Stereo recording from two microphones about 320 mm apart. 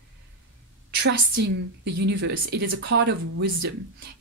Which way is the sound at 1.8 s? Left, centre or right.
Right.